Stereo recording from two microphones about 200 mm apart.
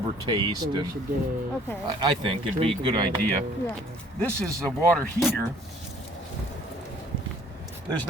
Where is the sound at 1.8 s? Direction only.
25° right (ahead or behind).